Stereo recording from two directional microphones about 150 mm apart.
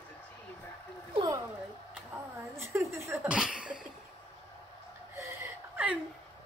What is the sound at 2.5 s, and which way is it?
Speech, 20° right (ahead or behind).